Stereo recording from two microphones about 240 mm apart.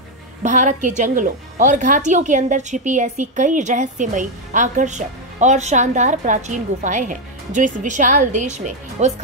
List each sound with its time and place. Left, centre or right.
0.4 s a woman's voice: right